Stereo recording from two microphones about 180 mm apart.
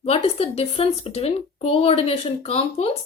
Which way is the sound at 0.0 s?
35° left (ahead or behind).